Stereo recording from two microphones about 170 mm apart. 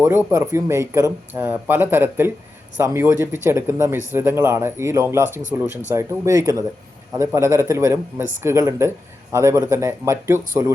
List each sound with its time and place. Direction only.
0.0 s speech: 15° right (ahead or behind)